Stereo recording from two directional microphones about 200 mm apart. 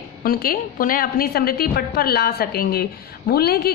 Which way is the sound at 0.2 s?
45° left (ahead or behind).